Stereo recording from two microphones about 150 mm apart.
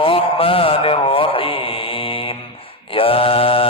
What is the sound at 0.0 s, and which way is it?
Mantra, 35° left (ahead or behind).